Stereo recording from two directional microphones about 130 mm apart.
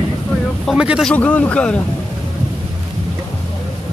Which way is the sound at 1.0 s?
10° left (ahead or behind).